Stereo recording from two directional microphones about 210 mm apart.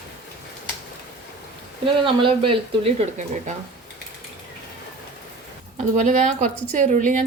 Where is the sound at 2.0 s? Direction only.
25° right (ahead or behind).